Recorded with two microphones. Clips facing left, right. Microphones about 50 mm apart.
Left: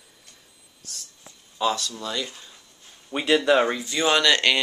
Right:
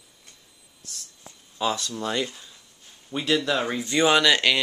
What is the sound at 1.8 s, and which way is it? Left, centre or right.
Speech, right.